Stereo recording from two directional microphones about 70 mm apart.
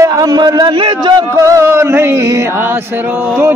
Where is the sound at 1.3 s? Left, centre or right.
Right.